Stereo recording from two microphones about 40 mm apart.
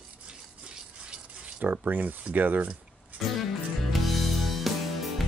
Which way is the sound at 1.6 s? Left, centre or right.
Right.